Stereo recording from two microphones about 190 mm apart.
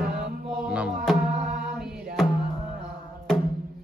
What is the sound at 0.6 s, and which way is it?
Music, 5° right (ahead or behind).